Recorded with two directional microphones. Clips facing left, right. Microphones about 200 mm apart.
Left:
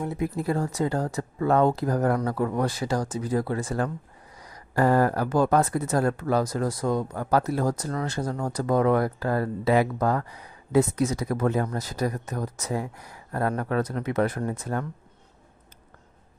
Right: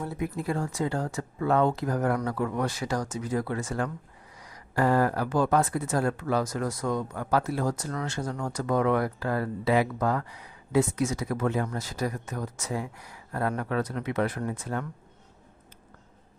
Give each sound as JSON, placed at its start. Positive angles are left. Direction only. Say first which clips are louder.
{"t": 0.2, "sound": "speech", "louder": "left 3 dB", "side_deg": 35}